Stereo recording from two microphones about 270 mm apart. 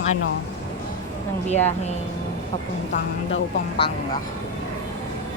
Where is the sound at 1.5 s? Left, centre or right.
Left.